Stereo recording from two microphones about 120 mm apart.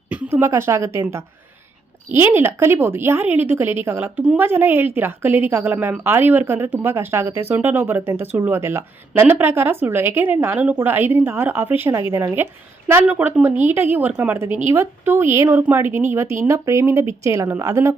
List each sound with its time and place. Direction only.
0.1 s a woman's voice: 15° right (ahead or behind)